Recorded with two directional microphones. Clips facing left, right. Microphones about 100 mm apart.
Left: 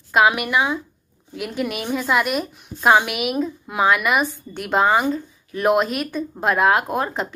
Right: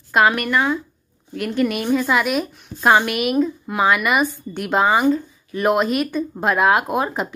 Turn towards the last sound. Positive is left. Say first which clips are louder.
# right 2 dB
turn(degrees=-5)  # may be behind; listen again after turning